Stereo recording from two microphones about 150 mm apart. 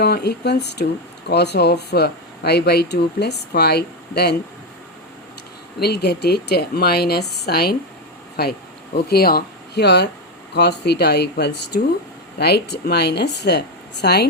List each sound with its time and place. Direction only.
0.0 s speech: 90° left
5.8 s speech: 90° left